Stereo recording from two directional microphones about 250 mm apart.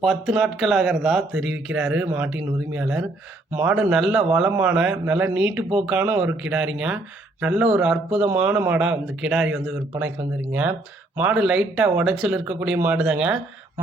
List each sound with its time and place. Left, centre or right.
0.0 s speech: centre
11.2 s speech: centre